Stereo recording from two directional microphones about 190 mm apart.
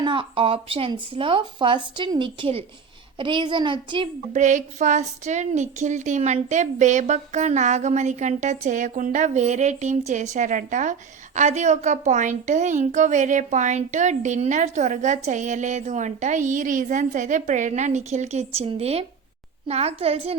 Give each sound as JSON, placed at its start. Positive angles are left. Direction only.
{"t": 0.0, "sound": "speech", "side_deg": -25}
{"t": 4.4, "sound": "a woman's voice", "side_deg": -40}